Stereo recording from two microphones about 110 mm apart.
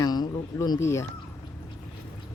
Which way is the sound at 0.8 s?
25° left (ahead or behind).